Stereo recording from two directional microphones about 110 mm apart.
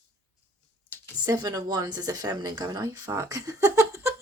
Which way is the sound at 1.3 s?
35° right (ahead or behind).